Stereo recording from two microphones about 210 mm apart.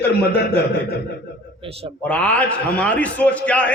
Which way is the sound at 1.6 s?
25° right (ahead or behind).